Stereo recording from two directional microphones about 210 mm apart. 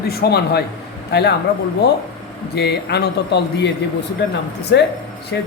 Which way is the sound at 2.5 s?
50° left (ahead or behind).